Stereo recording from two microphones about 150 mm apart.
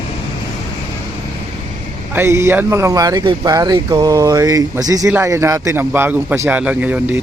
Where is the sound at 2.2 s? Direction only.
20° right (ahead or behind).